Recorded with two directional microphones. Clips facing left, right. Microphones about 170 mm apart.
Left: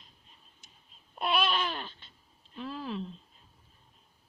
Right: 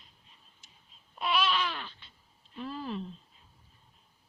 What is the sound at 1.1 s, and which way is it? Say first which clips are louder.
Babbling: even; 55° left (ahead or behind).